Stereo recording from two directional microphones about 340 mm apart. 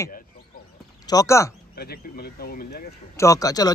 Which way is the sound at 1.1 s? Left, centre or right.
Centre.